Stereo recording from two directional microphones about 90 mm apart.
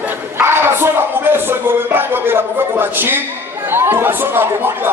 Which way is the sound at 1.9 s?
25° right (ahead or behind).